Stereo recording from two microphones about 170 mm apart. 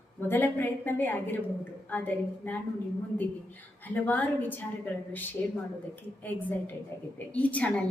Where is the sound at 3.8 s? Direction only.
10° left (ahead or behind).